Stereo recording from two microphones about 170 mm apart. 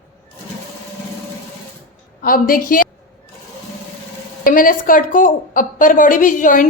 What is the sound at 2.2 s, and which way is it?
Speech, 55° left (ahead or behind).